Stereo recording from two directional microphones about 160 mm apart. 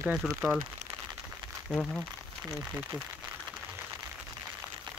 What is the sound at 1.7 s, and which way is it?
Speech, 5° left (ahead or behind).